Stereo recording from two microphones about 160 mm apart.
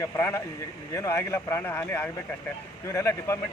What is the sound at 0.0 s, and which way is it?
Speech, 15° left (ahead or behind).